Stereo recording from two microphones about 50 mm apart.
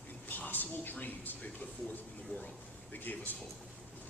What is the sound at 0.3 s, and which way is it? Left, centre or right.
A man's voice, left.